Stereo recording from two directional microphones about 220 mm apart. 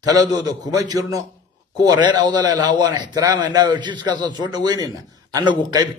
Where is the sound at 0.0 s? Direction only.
15° right (ahead or behind).